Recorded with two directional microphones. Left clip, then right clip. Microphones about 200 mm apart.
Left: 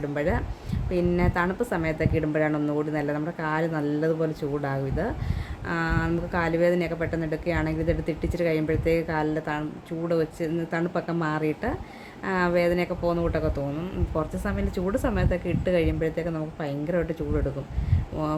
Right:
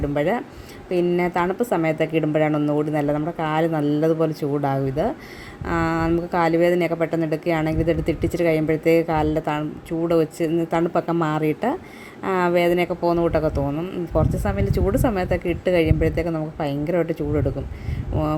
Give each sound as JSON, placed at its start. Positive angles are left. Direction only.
{"t": 0.1, "sound": "a woman's voice", "side_deg": -15}